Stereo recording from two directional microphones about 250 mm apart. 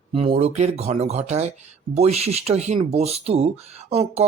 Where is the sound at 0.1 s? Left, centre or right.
Right.